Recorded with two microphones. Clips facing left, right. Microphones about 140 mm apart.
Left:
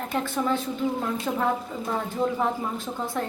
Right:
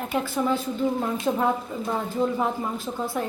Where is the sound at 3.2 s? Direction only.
10° right (ahead or behind).